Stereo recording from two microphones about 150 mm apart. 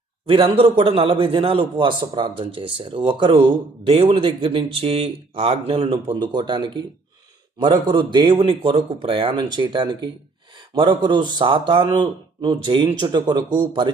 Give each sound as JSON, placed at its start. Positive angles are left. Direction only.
{"t": 0.3, "sound": "a man's voice", "side_deg": -35}